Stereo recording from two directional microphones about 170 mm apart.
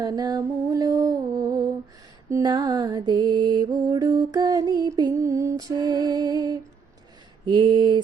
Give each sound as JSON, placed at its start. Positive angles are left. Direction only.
{"t": 0.0, "sound": "music", "side_deg": -25}
{"t": 2.3, "sound": "mantra", "side_deg": -25}